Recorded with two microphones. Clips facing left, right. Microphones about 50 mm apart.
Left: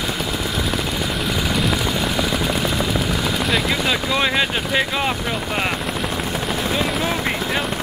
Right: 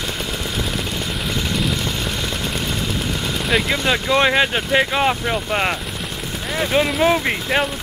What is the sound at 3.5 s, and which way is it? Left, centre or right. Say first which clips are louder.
Speech: right 4 dB; centre.